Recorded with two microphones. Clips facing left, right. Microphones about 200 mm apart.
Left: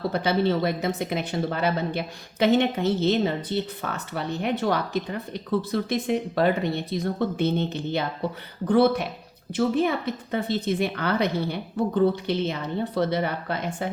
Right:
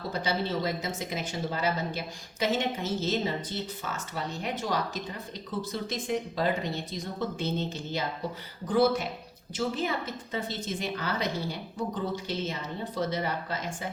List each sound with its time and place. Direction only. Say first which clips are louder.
0.1 s speech: left 5 dB; 60° left (ahead or behind)